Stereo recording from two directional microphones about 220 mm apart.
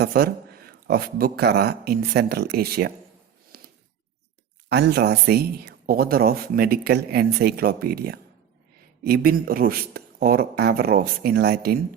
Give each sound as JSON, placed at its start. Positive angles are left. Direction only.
{"t": 0.0, "sound": "speech", "side_deg": -45}
{"t": 3.5, "sound": "a sound", "side_deg": -45}
{"t": 4.7, "sound": "speech", "side_deg": -45}